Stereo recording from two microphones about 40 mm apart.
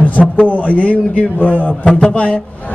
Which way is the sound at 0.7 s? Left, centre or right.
Left.